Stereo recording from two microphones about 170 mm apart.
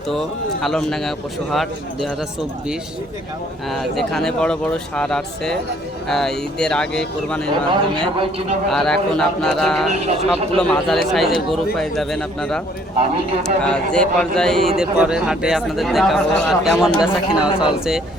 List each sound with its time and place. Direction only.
0.1 s speech: centre (ahead or behind)
3.7 s speech: centre (ahead or behind)
8.7 s speech: 5° left (ahead or behind)
9.9 s speech: 40° right (ahead or behind)
10.6 s speech: 5° left (ahead or behind)
17.5 s speech: 25° left (ahead or behind)